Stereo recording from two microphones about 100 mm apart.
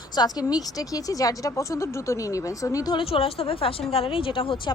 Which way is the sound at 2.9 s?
65° left (ahead or behind).